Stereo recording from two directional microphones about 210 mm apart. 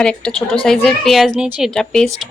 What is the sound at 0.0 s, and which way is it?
Speech, 5° left (ahead or behind).